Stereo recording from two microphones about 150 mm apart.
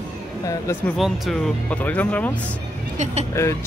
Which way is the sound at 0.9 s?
Centre (ahead or behind).